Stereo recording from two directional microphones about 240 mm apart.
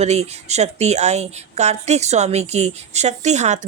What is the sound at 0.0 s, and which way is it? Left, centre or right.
Speech, right.